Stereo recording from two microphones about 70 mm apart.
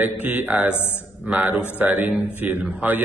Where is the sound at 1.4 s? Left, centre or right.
Right.